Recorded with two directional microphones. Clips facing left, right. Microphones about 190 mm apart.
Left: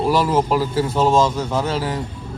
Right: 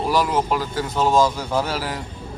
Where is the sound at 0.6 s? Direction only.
30° left (ahead or behind).